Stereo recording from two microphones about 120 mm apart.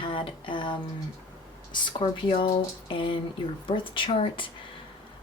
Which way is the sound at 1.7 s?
45° left (ahead or behind).